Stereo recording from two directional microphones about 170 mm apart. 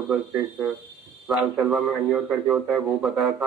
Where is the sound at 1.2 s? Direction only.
5° right (ahead or behind).